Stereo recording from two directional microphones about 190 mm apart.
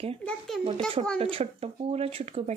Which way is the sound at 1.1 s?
30° right (ahead or behind).